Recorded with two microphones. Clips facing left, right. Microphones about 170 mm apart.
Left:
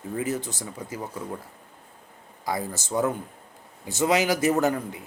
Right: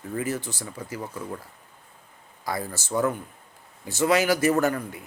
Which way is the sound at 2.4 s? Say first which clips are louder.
Left 1 dB; 15° left (ahead or behind).